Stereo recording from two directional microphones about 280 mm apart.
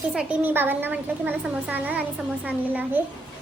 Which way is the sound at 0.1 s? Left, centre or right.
Centre.